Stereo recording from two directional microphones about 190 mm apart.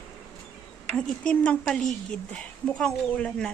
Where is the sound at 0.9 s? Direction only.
5° left (ahead or behind).